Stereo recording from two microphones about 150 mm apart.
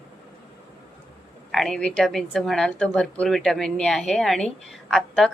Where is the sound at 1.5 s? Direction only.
Centre (ahead or behind).